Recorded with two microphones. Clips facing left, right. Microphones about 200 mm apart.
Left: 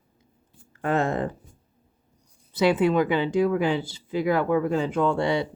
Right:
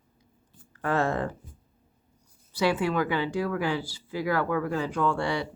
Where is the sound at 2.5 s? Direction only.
20° left (ahead or behind).